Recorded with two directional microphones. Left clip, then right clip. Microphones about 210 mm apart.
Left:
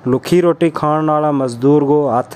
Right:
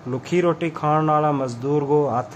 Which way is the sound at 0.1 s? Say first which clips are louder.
Left 8 dB; 50° left (ahead or behind).